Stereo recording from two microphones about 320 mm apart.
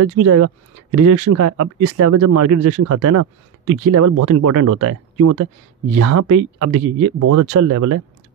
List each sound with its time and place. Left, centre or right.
0.0 s speech: right